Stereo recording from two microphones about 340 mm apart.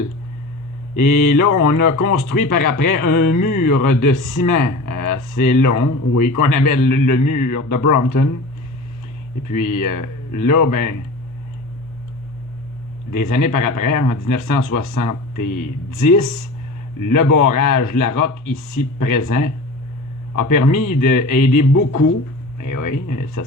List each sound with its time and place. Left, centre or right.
1.0 s speech: left
9.5 s speech: left
13.1 s speech: left
17.0 s speech: left